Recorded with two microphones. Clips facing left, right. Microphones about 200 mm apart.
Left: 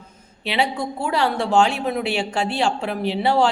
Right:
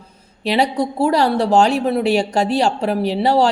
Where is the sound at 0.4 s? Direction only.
40° right (ahead or behind).